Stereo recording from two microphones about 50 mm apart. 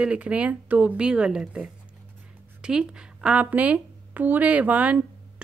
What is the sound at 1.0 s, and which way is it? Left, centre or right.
Speech, centre.